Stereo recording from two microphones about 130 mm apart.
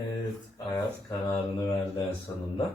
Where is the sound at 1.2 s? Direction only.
25° left (ahead or behind).